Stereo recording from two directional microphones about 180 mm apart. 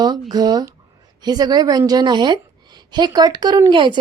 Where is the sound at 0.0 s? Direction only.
20° right (ahead or behind).